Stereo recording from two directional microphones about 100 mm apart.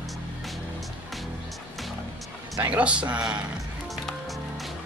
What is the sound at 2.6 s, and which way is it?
Speech, 15° right (ahead or behind).